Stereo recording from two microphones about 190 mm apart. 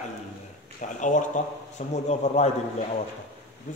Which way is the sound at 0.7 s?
40° left (ahead or behind).